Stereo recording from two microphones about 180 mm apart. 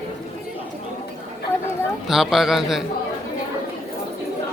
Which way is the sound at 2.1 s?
Centre (ahead or behind).